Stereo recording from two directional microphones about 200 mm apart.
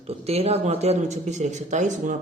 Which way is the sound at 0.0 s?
30° right (ahead or behind).